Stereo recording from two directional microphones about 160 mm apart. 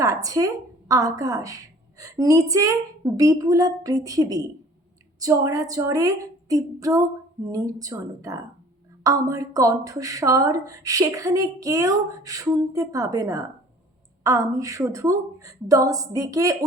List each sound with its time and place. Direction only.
0.0 s a woman's voice: 20° right (ahead or behind)